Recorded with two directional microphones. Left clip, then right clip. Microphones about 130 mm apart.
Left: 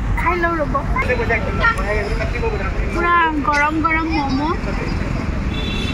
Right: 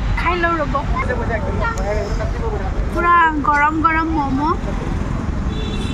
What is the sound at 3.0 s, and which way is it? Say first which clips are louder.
Speech: right 2 dB; 10° left (ahead or behind).